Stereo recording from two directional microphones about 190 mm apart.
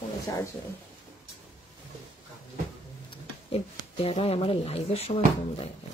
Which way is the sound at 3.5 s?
30° left (ahead or behind).